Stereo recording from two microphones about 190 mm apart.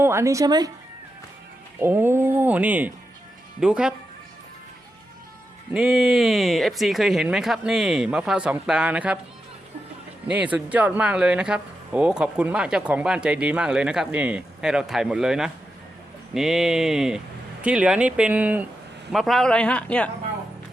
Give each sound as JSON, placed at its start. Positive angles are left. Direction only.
{"t": 0.0, "sound": "speech", "side_deg": -15}
{"t": 1.8, "sound": "speech", "side_deg": -10}
{"t": 5.7, "sound": "speech", "side_deg": -5}
{"t": 10.2, "sound": "speech", "side_deg": -5}